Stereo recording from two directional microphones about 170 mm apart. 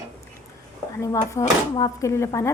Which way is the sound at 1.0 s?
20° left (ahead or behind).